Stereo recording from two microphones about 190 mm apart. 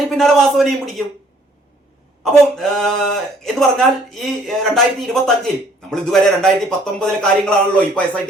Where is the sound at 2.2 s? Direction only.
Centre (ahead or behind).